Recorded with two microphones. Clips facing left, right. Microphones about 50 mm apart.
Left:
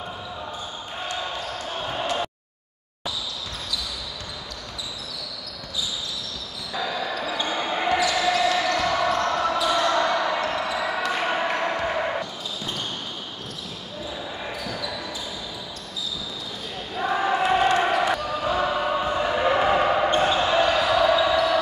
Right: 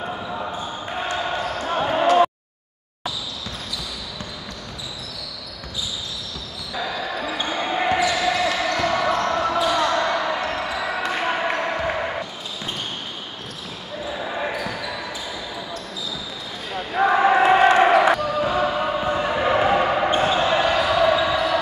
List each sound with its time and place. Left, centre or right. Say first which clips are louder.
1.7 s slam: right 10 dB; right
6.7 s basketball bounce: right 1 dB; centre
9.1 s basketball bounce: right 2 dB; right
9.8 s basketball bounce: right 1 dB; centre
11.5 s music: right 1 dB; centre
14.1 s basketball bounce: right 8 dB; right
16.7 s basketball bounce: right 7 dB; right
18.2 s basketball bounce: right 3 dB; centre